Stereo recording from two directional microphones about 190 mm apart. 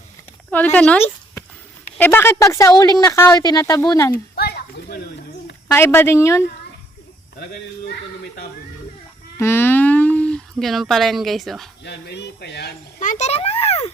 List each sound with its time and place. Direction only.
0.5 s speech: 10° left (ahead or behind)
4.1 s a sound: 55° left (ahead or behind)
5.7 s speech: 10° left (ahead or behind)
9.4 s speech: 10° left (ahead or behind)
11.8 s speech: 65° left (ahead or behind)
13.0 s a child's voice: 40° left (ahead or behind)